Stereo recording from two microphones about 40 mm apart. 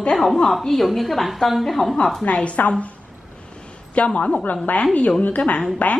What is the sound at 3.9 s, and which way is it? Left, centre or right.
A woman's voice, left.